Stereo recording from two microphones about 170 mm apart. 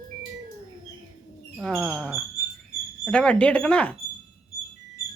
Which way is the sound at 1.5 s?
5° right (ahead or behind).